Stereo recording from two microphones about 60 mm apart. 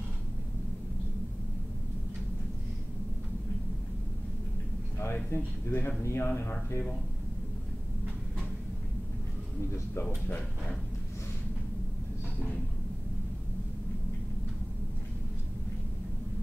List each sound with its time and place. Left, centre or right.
5.3 s speech: left